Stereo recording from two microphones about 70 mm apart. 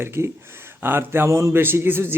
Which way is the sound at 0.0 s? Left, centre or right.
Right.